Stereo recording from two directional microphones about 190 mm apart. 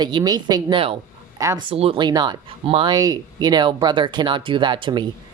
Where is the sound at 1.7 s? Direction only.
30° right (ahead or behind).